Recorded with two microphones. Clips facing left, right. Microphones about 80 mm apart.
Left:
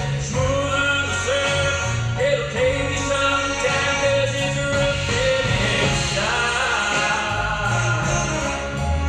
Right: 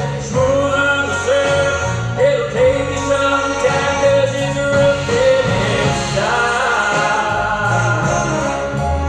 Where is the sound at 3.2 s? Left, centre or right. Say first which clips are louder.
Right 5 dB; right.